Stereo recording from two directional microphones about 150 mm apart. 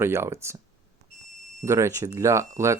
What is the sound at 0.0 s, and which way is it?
Speech, 15° right (ahead or behind).